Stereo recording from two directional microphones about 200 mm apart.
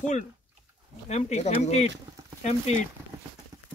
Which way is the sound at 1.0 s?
35° left (ahead or behind).